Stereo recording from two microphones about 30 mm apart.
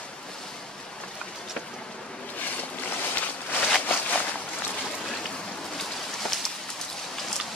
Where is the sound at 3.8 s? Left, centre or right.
Left.